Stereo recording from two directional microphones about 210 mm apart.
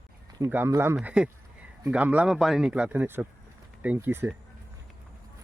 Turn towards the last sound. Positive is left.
turn(degrees=-10)  # may be behind; listen again after turning